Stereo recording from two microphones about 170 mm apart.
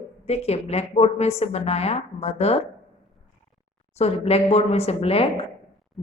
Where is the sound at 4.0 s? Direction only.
35° left (ahead or behind).